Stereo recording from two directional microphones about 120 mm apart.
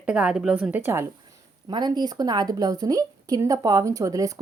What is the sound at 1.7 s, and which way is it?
A woman's voice, 40° right (ahead or behind).